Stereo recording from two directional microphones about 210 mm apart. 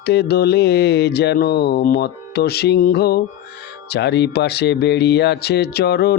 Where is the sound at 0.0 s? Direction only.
50° left (ahead or behind).